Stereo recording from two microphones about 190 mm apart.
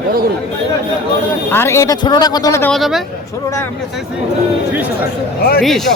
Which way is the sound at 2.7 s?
Centre (ahead or behind).